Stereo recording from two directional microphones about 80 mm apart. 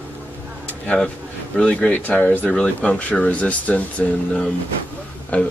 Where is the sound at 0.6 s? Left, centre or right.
Centre.